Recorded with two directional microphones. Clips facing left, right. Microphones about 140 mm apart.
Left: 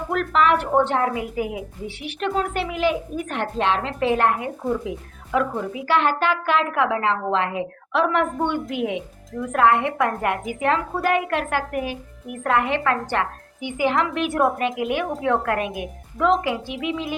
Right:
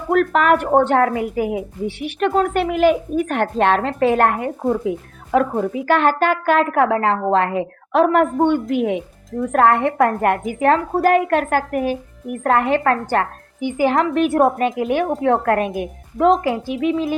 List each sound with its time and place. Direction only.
0.1 s a woman's voice: 45° right (ahead or behind)